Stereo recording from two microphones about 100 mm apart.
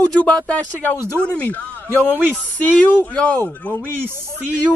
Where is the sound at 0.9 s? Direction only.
25° right (ahead or behind).